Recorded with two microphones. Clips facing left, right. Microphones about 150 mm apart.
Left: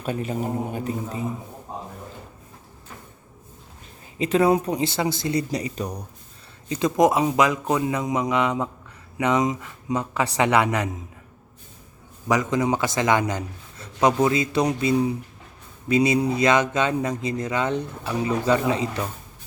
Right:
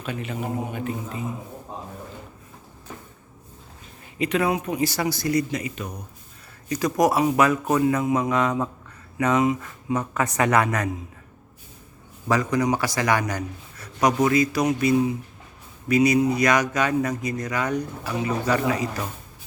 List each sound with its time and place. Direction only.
0.0 s a man's voice: 40° left (ahead or behind)
4.2 s a man's voice: 30° left (ahead or behind)
4.8 s speech: 25° left (ahead or behind)
6.7 s speech: 25° left (ahead or behind)
12.3 s speech: 20° left (ahead or behind)